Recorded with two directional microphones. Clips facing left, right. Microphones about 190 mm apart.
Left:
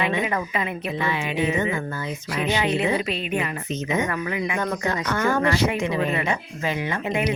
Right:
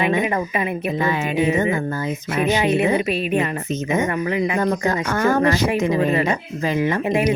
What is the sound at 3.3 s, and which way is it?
A woman's voice, 45° right (ahead or behind).